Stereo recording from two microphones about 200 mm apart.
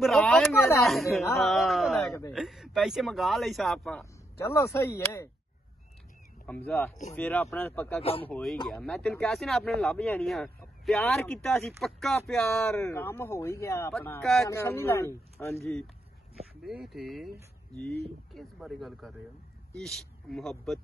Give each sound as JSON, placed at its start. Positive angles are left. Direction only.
{"t": 0.0, "sound": "a woman's voice", "side_deg": 0}
{"t": 4.0, "sound": "speech", "side_deg": 15}
{"t": 6.4, "sound": "speech", "side_deg": 10}
{"t": 8.0, "sound": "speech", "side_deg": 30}
{"t": 8.3, "sound": "speech", "side_deg": 0}
{"t": 16.6, "sound": "speech", "side_deg": 0}
{"t": 18.3, "sound": "speech", "side_deg": 0}